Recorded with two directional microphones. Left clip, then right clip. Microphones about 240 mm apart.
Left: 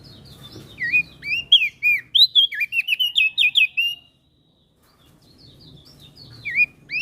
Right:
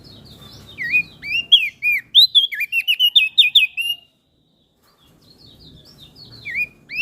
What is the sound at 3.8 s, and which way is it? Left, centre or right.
Bird, right.